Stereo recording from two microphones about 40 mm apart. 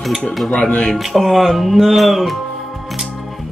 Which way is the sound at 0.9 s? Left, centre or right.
Centre.